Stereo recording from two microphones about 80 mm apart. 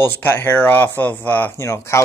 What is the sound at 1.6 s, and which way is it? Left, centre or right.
Speech, left.